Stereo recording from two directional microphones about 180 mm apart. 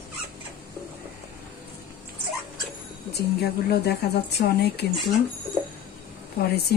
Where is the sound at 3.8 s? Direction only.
65° left (ahead or behind).